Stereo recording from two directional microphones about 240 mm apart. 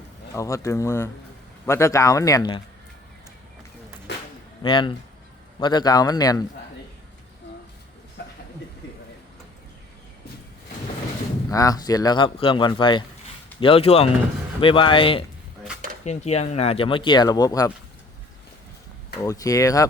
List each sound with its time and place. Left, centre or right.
0.3 s speech: centre
4.6 s speech: left
11.4 s speech: centre
19.2 s speech: centre